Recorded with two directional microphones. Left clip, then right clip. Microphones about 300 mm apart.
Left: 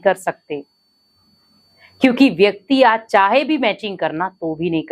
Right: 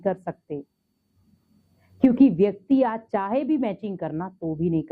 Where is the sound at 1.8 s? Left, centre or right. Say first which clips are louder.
Left 5 dB; centre.